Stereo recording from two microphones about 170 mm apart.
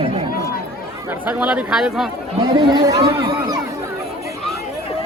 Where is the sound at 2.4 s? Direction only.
25° right (ahead or behind).